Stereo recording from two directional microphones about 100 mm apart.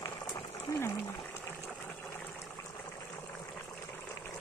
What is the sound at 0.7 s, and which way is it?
Speech, 40° left (ahead or behind).